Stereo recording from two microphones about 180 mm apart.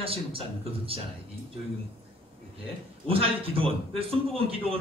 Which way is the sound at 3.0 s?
30° right (ahead or behind).